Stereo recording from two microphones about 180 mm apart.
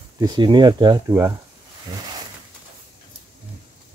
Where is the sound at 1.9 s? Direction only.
25° right (ahead or behind).